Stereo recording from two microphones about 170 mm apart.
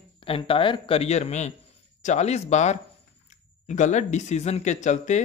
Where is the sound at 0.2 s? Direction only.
30° left (ahead or behind).